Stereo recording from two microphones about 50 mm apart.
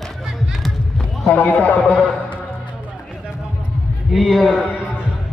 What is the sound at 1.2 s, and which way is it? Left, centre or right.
Speech, left.